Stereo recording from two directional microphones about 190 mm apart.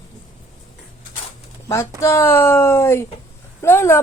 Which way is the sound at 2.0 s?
15° left (ahead or behind).